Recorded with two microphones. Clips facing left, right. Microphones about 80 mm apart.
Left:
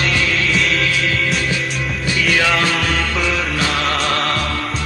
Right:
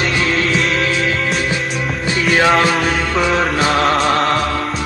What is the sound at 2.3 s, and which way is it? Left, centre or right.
Music, right.